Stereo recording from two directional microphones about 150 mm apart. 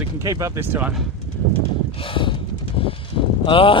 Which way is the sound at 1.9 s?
35° left (ahead or behind).